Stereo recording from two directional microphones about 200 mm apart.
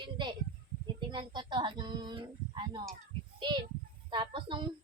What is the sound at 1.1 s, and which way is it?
Speech, 25° right (ahead or behind).